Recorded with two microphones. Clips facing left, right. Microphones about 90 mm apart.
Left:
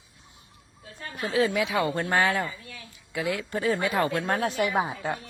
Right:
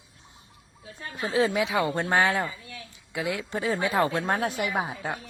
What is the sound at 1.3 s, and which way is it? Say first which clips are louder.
Speech: even; 30° right (ahead or behind).